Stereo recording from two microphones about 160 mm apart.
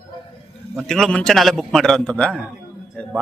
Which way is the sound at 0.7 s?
Centre (ahead or behind).